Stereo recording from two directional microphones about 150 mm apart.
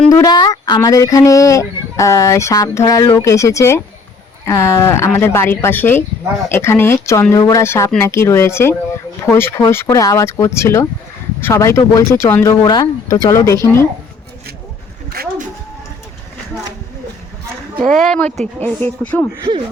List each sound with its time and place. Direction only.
0.1 s speech: 25° left (ahead or behind)
15.1 s a sound: 80° right
18.0 s speech: 5° left (ahead or behind)